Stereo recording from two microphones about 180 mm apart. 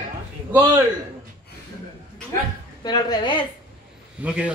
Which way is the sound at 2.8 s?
20° left (ahead or behind).